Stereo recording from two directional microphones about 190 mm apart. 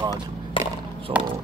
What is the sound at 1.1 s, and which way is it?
Speech, 5° right (ahead or behind).